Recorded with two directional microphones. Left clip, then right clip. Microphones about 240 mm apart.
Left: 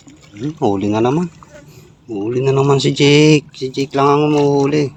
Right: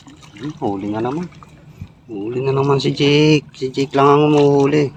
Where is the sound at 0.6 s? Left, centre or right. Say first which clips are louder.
Left 6 dB; left.